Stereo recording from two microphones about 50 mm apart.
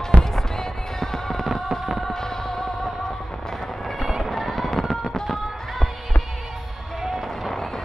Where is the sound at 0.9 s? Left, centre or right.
Centre.